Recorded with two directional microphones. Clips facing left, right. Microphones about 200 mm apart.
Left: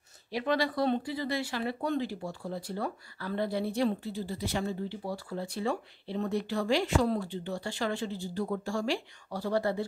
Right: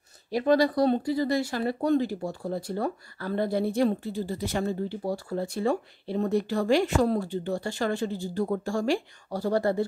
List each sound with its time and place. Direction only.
0.3 s speech: 40° right (ahead or behind)